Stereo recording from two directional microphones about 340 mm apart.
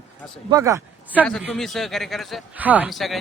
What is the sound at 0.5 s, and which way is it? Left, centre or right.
A man's voice, centre.